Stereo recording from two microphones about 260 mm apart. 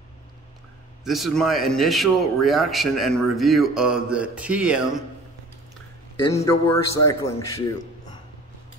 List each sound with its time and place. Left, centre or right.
1.0 s speech: centre
6.3 s a man's voice: centre